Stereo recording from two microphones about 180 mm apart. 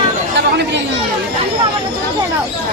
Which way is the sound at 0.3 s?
75° right (ahead or behind).